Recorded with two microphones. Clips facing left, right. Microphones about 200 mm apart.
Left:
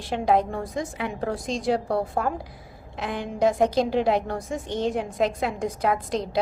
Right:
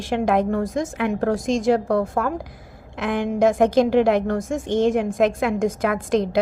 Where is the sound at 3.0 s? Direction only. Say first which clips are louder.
Right 7 dB; 75° right (ahead or behind).